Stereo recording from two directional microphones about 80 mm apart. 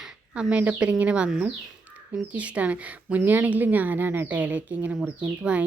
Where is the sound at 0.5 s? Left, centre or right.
Centre.